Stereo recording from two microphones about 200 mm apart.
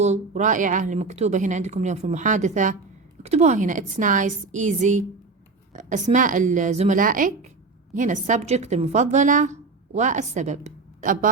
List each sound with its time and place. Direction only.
0.0 s a woman's voice: 35° right (ahead or behind)